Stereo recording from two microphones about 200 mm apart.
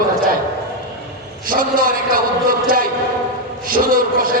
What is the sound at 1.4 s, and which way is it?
A man's voice, 45° right (ahead or behind).